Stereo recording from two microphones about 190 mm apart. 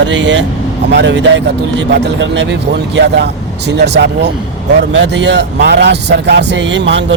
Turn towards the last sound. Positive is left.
turn(degrees=-70)  # may be behind; listen again after turning